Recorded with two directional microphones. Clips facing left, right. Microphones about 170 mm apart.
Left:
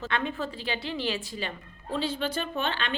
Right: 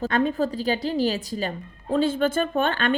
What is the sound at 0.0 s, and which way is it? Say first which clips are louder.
A woman's voice: right 8 dB; 40° right (ahead or behind).